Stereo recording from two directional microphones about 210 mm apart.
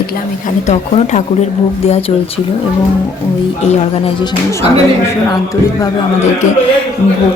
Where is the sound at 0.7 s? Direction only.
35° left (ahead or behind).